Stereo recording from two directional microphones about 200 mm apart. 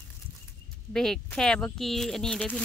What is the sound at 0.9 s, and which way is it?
Speech, 5° left (ahead or behind).